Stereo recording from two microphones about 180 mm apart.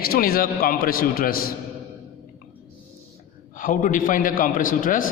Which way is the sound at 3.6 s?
45° left (ahead or behind).